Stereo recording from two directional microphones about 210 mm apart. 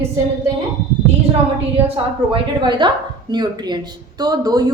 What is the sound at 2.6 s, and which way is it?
A woman's voice, 20° right (ahead or behind).